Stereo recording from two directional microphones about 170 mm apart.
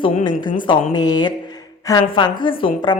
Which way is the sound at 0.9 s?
25° left (ahead or behind).